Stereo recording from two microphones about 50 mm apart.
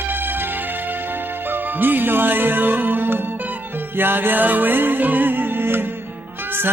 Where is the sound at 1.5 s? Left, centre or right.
Right.